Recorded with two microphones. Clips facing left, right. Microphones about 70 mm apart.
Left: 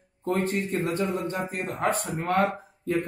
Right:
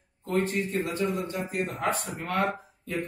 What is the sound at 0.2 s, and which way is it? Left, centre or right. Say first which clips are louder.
A man's voice: left 1 dB; left.